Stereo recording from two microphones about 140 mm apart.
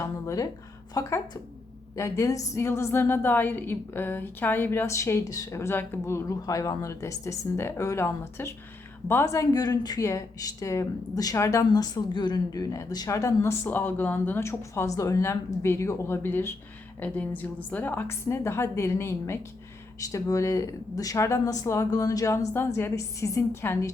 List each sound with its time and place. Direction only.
0.0 s a woman's voice: 20° left (ahead or behind)